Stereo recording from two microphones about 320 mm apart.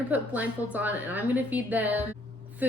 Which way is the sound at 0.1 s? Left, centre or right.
Centre.